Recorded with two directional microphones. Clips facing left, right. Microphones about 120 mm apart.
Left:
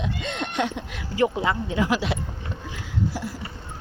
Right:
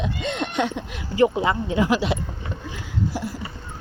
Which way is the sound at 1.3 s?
15° right (ahead or behind).